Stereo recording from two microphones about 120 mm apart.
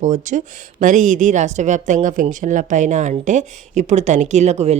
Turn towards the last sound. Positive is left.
turn(degrees=-70)  # may be behind; listen again after turning